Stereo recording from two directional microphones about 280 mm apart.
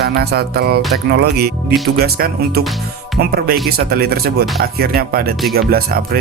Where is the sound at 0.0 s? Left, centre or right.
Right.